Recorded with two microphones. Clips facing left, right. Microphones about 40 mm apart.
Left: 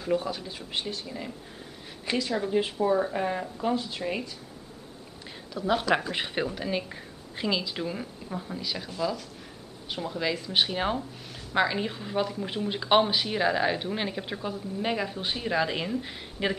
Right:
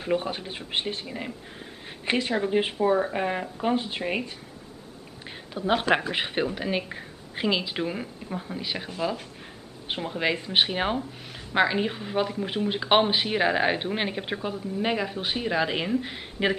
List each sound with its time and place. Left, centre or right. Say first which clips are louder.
0.0 s speech: right 1 dB; right
5.5 s speech: right 2 dB; right
6.1 s speech: right 3 dB; right
8.3 s speech: right 1 dB; centre
8.5 s speech: right 1 dB; right